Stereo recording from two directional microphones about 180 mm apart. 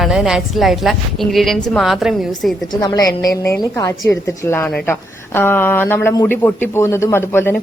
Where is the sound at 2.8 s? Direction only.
20° left (ahead or behind).